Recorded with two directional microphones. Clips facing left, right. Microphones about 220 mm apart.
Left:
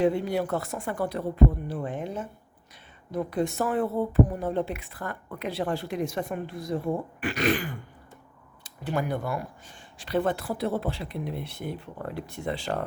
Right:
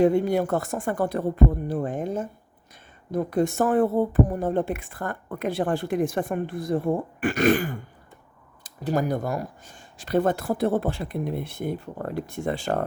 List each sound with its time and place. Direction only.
0.0 s speech: 45° right (ahead or behind)